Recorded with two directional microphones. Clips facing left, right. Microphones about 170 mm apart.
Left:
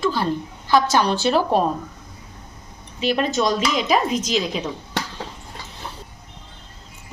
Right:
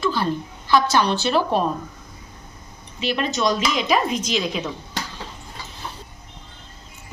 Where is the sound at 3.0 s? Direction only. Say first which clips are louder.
Left 2 dB; 45° left (ahead or behind).